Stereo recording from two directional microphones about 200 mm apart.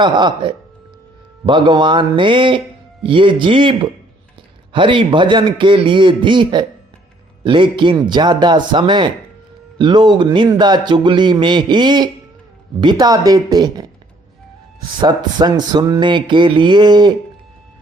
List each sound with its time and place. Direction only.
0.0 s speech: 20° right (ahead or behind)
15.0 s speech: 20° right (ahead or behind)